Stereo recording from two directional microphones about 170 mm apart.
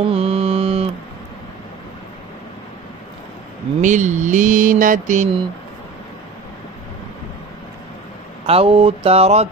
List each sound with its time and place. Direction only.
0.0 s mantra: 35° right (ahead or behind)
3.8 s mantra: 45° right (ahead or behind)
8.5 s a sound: 35° right (ahead or behind)